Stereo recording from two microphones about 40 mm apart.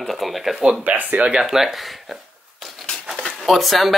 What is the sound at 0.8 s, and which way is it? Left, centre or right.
Speech, right.